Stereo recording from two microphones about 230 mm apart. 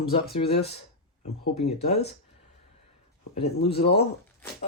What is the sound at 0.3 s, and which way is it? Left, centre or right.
Speech, left.